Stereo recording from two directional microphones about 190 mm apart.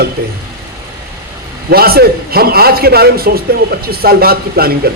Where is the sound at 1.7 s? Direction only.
55° right (ahead or behind).